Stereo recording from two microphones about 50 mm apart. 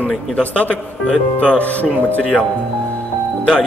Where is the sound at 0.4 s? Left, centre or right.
Left.